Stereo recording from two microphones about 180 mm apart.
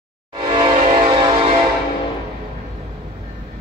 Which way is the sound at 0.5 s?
30° right (ahead or behind).